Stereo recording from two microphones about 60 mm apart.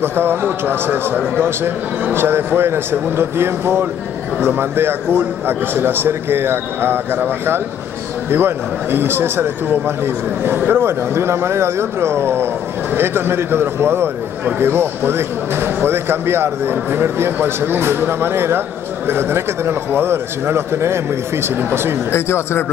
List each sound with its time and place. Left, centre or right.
0.0 s a man's voice: right
22.1 s speech: left